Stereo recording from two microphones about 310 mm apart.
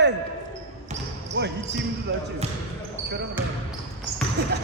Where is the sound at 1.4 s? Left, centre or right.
Right.